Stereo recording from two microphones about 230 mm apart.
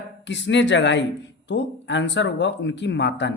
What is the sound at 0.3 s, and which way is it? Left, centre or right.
Speech, left.